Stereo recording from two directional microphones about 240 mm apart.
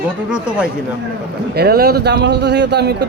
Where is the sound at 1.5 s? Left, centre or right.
Right.